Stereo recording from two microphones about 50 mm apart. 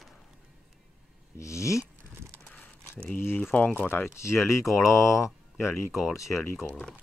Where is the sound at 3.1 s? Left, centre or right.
Left.